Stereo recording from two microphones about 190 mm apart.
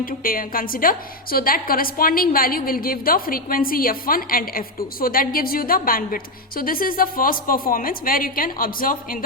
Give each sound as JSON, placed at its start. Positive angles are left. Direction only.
{"t": 0.0, "sound": "a woman's voice", "side_deg": 50}